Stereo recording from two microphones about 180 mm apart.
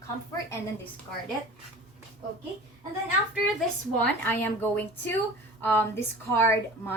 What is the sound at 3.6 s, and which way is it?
A woman's voice, 10° left (ahead or behind).